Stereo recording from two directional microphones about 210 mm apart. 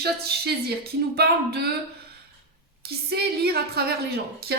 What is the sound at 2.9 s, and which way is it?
Speech, 50° right (ahead or behind).